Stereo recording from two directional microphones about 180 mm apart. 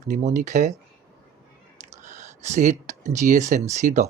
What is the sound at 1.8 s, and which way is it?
Speech, 40° right (ahead or behind).